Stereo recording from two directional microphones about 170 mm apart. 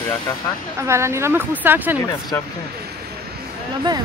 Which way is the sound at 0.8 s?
15° right (ahead or behind).